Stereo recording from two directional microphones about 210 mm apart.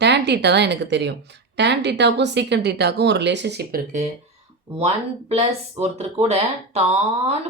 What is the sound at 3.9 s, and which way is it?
Speech, 35° right (ahead or behind).